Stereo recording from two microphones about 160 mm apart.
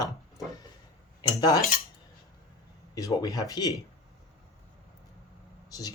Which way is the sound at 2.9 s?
20° left (ahead or behind).